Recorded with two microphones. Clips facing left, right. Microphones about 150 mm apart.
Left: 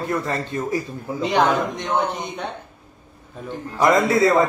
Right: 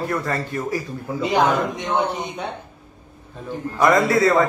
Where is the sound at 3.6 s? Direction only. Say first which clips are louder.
Even; 10° left (ahead or behind).